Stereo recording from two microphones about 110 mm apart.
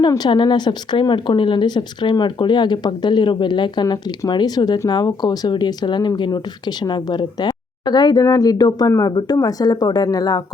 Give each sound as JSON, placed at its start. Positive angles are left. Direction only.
{"t": 0.3, "sound": "speech", "side_deg": 45}